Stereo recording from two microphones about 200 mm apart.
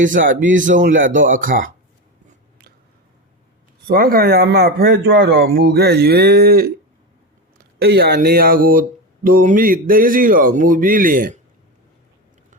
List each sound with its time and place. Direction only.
0.0 s a man's voice: 40° right (ahead or behind)
3.8 s speech: 50° right (ahead or behind)